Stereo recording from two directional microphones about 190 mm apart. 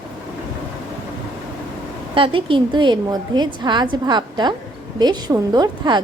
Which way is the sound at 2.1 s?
25° right (ahead or behind).